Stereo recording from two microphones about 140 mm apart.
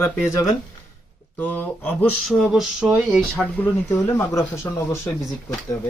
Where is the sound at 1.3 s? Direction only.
10° left (ahead or behind).